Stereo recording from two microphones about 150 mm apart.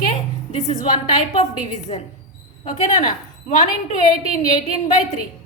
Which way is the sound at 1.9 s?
40° left (ahead or behind).